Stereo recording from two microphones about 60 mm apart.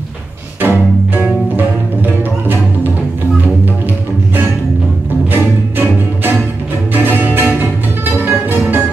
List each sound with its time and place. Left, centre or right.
0.6 s music: right
2.4 s music: right
5.3 s music: right